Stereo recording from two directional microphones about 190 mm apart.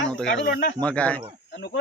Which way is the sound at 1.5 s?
60° left (ahead or behind).